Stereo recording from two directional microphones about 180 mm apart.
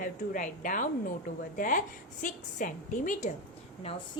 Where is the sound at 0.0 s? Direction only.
45° left (ahead or behind).